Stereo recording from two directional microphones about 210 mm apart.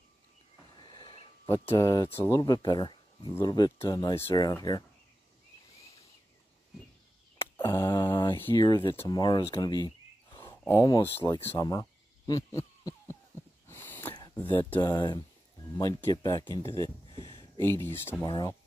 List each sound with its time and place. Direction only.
0.8 s speech: 20° left (ahead or behind)
7.6 s mantra: 10° left (ahead or behind)
8.5 s speech: 20° left (ahead or behind)
9.5 s a sound: 15° left (ahead or behind)
10.7 s speech: 15° left (ahead or behind)
13.7 s a sound: 10° left (ahead or behind)
14.8 s speech: 20° left (ahead or behind)
17.2 s a sound: 20° left (ahead or behind)
17.8 s speech: 10° left (ahead or behind)
18.2 s speech: 20° left (ahead or behind)